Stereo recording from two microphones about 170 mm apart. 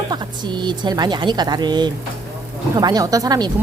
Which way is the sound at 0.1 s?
25° right (ahead or behind).